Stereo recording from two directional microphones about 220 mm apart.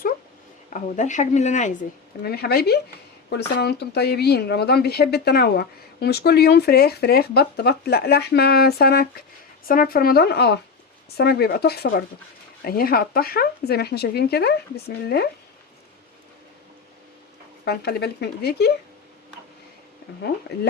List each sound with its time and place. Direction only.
0.7 s a woman's voice: 35° left (ahead or behind)
2.2 s speech: 45° left (ahead or behind)
17.7 s speech: 45° left (ahead or behind)